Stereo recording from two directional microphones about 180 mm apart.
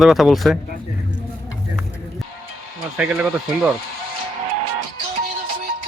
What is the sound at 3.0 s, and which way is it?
Speech, 5° right (ahead or behind).